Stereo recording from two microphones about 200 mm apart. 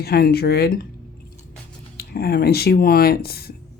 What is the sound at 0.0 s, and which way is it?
Speech, 50° left (ahead or behind).